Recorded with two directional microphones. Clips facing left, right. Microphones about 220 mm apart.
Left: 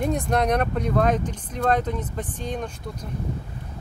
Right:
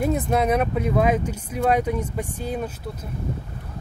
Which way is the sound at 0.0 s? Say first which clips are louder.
Right 2 dB; 5° right (ahead or behind).